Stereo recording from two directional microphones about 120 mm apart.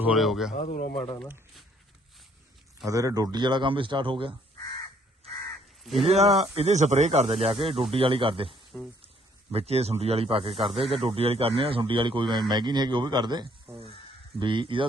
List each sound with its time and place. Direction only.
0.2 s speech: centre (ahead or behind)
0.5 s speech: 80° left
0.9 s speech: 50° left (ahead or behind)
2.8 s a man's voice: 30° right (ahead or behind); by 4.4 s 45° right (ahead or behind)
5.8 s speech: centre (ahead or behind)
6.1 s speech: 60° right (ahead or behind)
8.7 s speech: 5° left (ahead or behind)
9.5 s a man's voice: 55° right (ahead or behind)